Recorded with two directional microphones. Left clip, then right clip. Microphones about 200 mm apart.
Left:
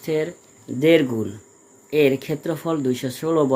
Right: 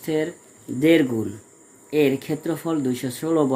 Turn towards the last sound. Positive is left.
turn(degrees=25)  # may be behind; listen again after turning